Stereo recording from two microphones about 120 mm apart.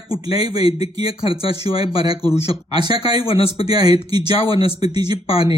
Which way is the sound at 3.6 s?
35° right (ahead or behind).